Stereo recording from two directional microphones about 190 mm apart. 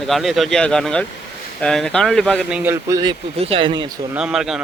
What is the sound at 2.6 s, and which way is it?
Speech, 15° right (ahead or behind).